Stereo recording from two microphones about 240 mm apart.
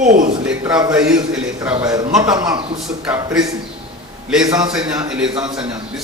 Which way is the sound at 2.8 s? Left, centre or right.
Centre.